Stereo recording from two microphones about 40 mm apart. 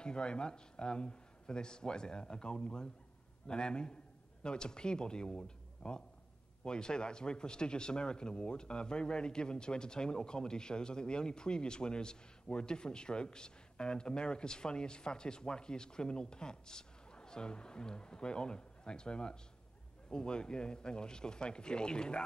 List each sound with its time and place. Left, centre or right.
0.0 s speech: left